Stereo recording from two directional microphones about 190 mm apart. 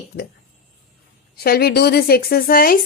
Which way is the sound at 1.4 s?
55° left (ahead or behind).